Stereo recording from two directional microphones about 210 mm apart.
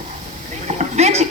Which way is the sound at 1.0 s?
30° right (ahead or behind).